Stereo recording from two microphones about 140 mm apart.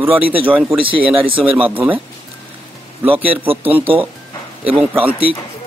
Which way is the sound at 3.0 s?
40° right (ahead or behind).